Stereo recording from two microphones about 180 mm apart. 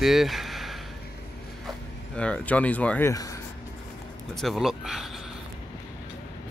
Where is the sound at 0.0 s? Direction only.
Centre (ahead or behind).